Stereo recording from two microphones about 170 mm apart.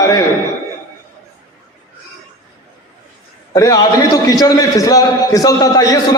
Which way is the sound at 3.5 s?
20° left (ahead or behind).